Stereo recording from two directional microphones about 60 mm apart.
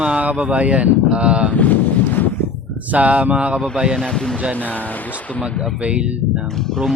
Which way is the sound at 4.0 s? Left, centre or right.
Centre.